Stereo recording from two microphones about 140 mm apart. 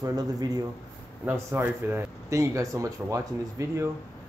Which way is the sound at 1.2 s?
15° right (ahead or behind).